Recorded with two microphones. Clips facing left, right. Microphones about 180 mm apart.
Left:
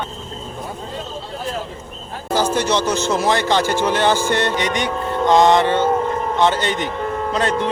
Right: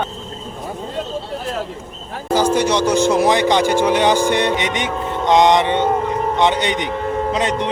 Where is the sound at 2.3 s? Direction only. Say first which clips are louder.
Right 2 dB; 10° right (ahead or behind).